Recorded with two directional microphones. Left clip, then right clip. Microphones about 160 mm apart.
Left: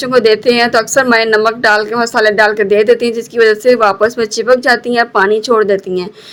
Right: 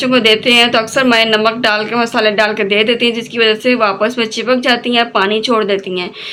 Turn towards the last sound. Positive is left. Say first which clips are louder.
# left 3 dB
turn(degrees=40)  # may be behind; listen again after turning